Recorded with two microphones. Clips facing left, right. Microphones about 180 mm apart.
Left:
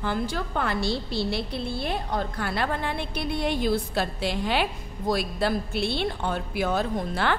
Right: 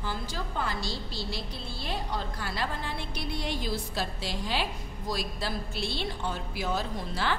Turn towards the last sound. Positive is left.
turn(degrees=60)  # may be behind; listen again after turning